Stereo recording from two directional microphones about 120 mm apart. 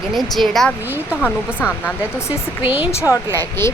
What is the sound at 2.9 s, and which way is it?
Speech, 20° left (ahead or behind).